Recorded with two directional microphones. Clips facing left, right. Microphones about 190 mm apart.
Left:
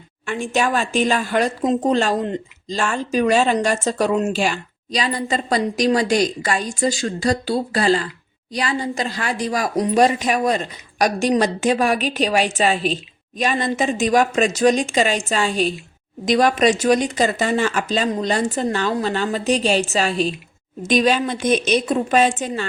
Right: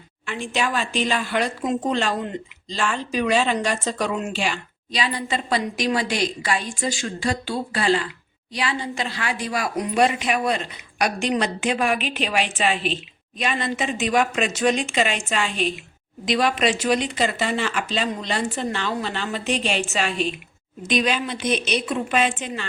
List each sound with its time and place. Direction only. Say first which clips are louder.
0.3 s speech: left 5 dB; 45° left (ahead or behind)